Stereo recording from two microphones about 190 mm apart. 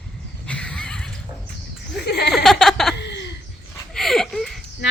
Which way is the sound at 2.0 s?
60° left (ahead or behind).